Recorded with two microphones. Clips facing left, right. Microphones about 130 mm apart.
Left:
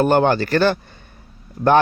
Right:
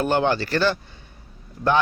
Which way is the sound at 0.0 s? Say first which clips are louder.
Left 5 dB; 50° left (ahead or behind).